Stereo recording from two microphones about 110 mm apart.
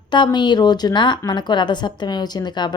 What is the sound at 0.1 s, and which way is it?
A woman's voice, 45° left (ahead or behind).